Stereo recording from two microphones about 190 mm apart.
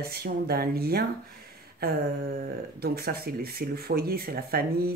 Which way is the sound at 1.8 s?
55° right (ahead or behind).